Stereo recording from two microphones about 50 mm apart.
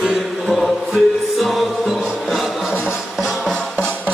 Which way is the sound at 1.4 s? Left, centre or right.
Centre.